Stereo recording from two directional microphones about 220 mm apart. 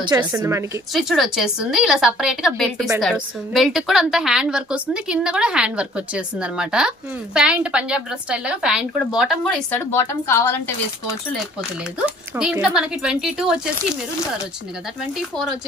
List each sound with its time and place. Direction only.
0.0 s a woman's voice: 20° right (ahead or behind)
0.9 s a woman's voice: centre (ahead or behind)
12.4 s a woman's voice: 5° right (ahead or behind)
15.1 s a woman's voice: centre (ahead or behind)